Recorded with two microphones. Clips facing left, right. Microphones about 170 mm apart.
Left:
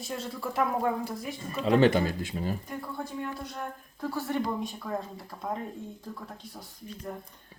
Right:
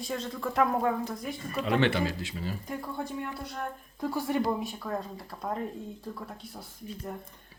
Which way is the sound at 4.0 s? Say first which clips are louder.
Right 2 dB; 15° right (ahead or behind).